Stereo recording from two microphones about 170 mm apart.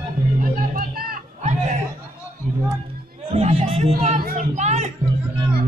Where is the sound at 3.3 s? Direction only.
40° right (ahead or behind).